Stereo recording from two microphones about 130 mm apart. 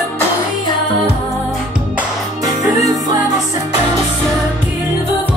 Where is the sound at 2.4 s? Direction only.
30° right (ahead or behind).